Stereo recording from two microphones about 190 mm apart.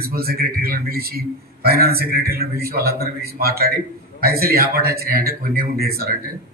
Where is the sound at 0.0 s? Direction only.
55° right (ahead or behind).